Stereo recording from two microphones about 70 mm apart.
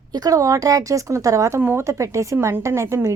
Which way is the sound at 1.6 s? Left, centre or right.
Right.